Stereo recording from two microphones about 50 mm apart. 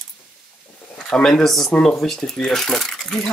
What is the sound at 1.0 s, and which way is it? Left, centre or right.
A child's voice, centre.